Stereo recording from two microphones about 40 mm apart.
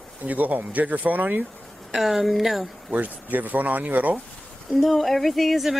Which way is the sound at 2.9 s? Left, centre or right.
Right.